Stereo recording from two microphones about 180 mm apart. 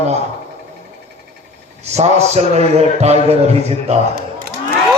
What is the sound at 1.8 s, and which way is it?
A man's voice, 40° right (ahead or behind).